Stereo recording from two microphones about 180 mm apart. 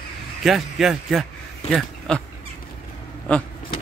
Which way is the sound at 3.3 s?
5° left (ahead or behind).